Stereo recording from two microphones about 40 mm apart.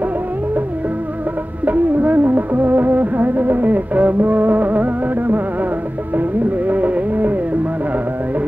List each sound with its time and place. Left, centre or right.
1.7 s music: right